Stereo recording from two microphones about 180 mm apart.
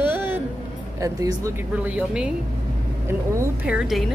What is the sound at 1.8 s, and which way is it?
Speech, 5° right (ahead or behind).